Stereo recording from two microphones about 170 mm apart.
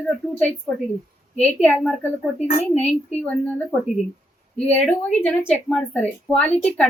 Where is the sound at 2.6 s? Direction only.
40° left (ahead or behind).